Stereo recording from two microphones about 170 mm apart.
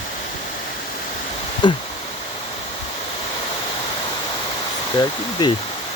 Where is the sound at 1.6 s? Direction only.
25° left (ahead or behind).